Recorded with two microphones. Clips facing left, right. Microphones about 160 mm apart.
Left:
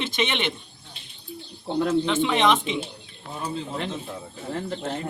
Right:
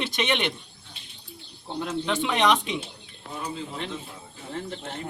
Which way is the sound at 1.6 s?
55° left (ahead or behind).